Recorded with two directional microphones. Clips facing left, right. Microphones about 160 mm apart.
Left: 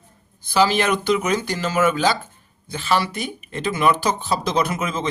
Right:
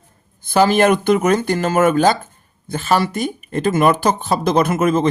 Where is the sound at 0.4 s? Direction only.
50° right (ahead or behind).